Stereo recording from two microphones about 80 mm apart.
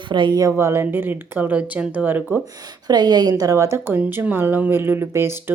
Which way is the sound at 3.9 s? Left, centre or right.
Right.